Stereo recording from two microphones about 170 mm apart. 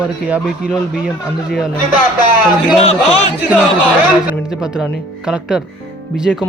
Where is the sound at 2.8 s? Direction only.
35° left (ahead or behind).